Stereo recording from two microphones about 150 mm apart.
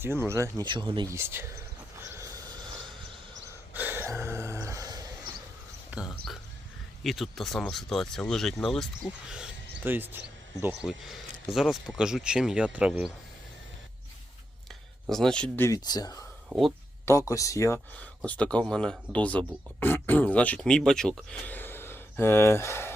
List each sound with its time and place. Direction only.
0.0 s speech: 15° right (ahead or behind)
0.6 s speech: 30° right (ahead or behind)
1.1 s speech: 15° right (ahead or behind)
2.0 s a sound: 20° right (ahead or behind)
3.8 s a sound: 15° right (ahead or behind)
5.9 s speech: 5° right (ahead or behind)
9.3 s speech: 10° right (ahead or behind)
10.8 s speech: centre (ahead or behind)
15.1 s speech: 5° left (ahead or behind); by 16.2 s 25° left (ahead or behind)
16.5 s speech: 5° right (ahead or behind)
17.1 s speech: 20° left (ahead or behind)
18.3 s speech: 5° left (ahead or behind)